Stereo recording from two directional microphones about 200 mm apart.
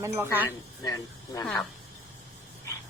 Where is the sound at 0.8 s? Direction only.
20° left (ahead or behind).